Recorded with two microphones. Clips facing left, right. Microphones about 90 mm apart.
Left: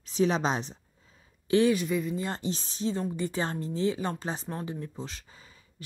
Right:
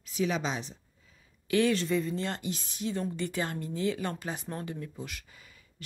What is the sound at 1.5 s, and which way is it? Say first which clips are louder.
Speech: left 3 dB; 20° left (ahead or behind).